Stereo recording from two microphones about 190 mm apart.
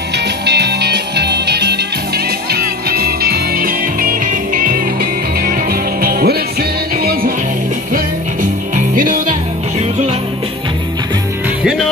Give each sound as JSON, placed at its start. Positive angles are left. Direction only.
{"t": 0.5, "sound": "music", "side_deg": -60}